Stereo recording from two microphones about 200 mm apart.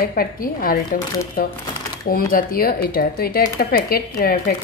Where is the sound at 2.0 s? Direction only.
45° left (ahead or behind).